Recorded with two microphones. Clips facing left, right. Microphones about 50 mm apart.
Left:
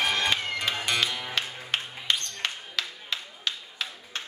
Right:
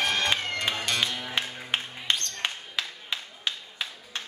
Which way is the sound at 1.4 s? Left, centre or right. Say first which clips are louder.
Right 2 dB; centre.